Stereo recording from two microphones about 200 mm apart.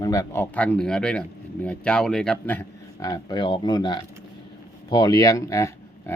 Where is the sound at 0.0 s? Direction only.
15° left (ahead or behind).